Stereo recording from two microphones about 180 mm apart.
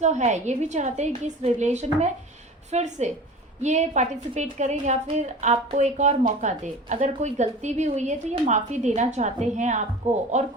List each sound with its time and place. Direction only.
0.0 s a woman's voice: 40° right (ahead or behind)